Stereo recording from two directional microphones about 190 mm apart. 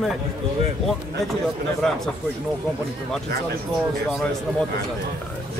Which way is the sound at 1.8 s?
Centre (ahead or behind).